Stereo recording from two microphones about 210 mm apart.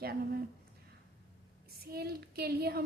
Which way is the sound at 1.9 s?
50° right (ahead or behind).